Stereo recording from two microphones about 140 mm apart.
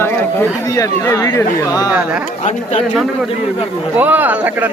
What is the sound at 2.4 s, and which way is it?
Speech, 50° left (ahead or behind).